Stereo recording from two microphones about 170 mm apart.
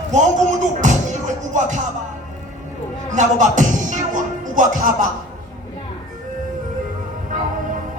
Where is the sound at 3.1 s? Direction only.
45° right (ahead or behind).